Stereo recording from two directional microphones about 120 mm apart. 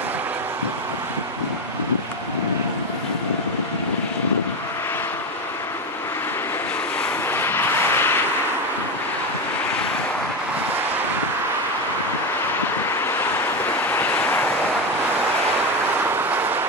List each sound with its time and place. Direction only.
7.2 s vehicle: 20° left (ahead or behind)
13.8 s vehicle: 15° left (ahead or behind)
16.3 s vehicle: 15° right (ahead or behind)